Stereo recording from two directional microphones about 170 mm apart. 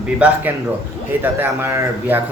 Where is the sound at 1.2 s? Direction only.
15° right (ahead or behind).